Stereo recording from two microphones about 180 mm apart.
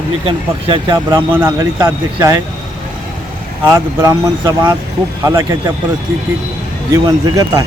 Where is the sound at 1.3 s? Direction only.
10° right (ahead or behind).